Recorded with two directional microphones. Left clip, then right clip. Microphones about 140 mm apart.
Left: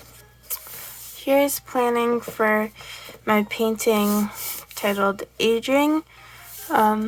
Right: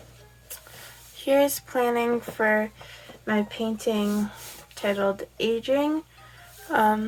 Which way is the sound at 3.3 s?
55° left (ahead or behind).